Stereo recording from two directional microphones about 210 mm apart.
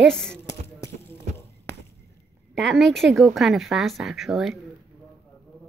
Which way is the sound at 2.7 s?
Centre (ahead or behind).